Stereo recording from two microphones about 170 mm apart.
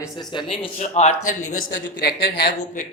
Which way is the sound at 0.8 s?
45° left (ahead or behind).